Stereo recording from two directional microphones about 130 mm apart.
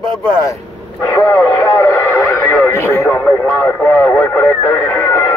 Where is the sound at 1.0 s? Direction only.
25° left (ahead or behind).